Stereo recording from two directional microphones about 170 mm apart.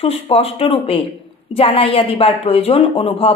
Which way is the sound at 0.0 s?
35° left (ahead or behind).